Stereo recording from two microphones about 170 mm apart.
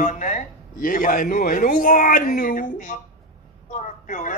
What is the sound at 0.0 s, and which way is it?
A woman's voice, 45° left (ahead or behind).